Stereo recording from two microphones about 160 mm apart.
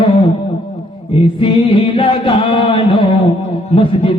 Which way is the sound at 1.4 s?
35° left (ahead or behind).